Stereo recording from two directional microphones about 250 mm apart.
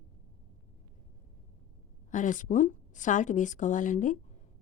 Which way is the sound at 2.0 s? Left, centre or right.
Left.